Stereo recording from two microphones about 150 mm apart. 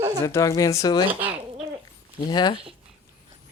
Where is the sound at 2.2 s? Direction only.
30° left (ahead or behind).